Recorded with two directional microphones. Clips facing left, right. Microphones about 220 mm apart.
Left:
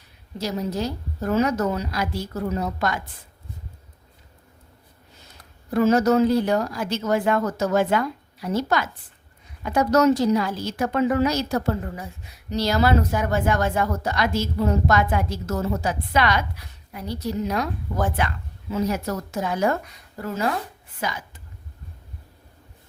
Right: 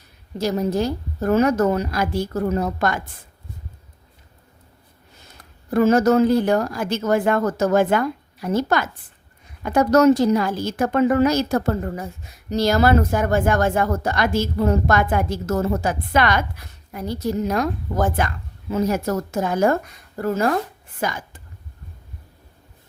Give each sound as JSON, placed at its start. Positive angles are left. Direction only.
{"t": 0.3, "sound": "speech", "side_deg": -50}
{"t": 5.7, "sound": "a woman's voice", "side_deg": -50}